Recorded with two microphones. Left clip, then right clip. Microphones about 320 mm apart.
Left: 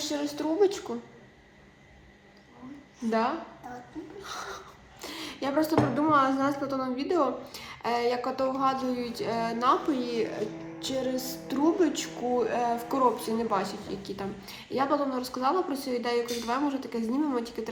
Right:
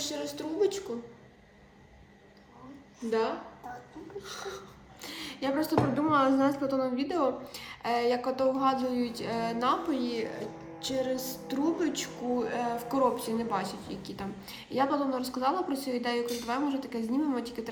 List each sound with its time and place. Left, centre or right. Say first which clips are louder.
0.0 s a woman's voice: left 4 dB; centre
4.2 s a woman's voice: left 2 dB; centre
4.9 s speech: left 2 dB; centre